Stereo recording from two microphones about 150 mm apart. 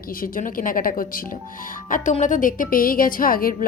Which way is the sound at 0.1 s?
70° left (ahead or behind).